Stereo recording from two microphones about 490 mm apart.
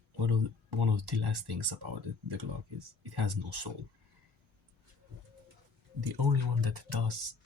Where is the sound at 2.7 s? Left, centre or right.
Right.